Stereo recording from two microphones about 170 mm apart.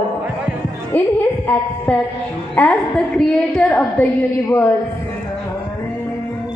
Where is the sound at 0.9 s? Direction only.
10° left (ahead or behind).